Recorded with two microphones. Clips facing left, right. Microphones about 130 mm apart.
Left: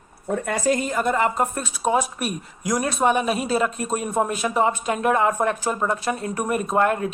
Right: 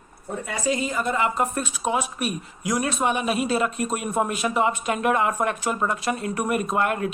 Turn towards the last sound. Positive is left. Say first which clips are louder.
# left 3 dB
turn(degrees=35)  # may be behind; listen again after turning